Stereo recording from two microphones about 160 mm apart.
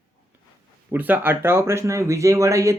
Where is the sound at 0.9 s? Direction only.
10° right (ahead or behind).